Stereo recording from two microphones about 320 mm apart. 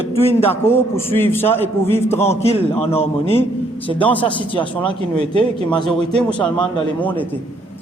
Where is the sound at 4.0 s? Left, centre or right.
Centre.